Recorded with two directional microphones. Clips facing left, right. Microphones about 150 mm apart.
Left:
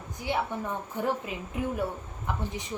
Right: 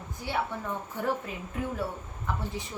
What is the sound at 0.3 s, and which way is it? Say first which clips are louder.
Speech: left 2 dB; 15° left (ahead or behind).